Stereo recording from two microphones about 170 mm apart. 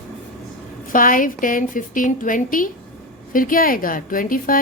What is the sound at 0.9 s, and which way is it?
A woman's voice, 55° left (ahead or behind).